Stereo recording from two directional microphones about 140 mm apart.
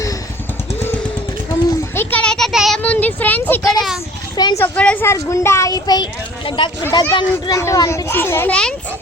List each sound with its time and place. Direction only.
2.0 s child singing: 10° left (ahead or behind)
2.8 s a child's voice: 10° left (ahead or behind)
3.6 s speech: 25° left (ahead or behind)
4.6 s a child's voice: 10° left (ahead or behind)
5.0 s a child's voice: 20° left (ahead or behind)